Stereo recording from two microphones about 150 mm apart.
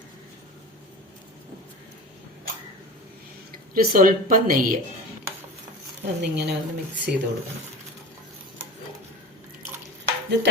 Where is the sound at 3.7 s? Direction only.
70° right (ahead or behind).